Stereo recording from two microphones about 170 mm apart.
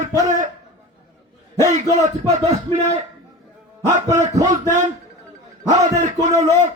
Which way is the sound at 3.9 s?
45° right (ahead or behind).